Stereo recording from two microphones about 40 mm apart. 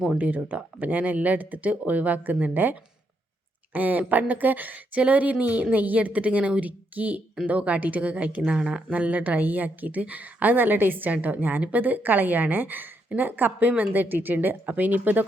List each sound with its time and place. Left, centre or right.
0.1 s a woman's voice: right
8.5 s speech: right
8.9 s a woman's voice: right